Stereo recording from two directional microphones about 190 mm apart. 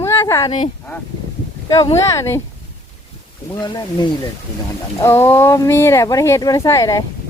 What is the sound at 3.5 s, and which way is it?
Speech, 20° left (ahead or behind).